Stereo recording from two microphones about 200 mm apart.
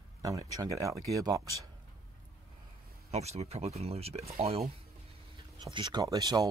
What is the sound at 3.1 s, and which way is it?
Speech, 35° right (ahead or behind).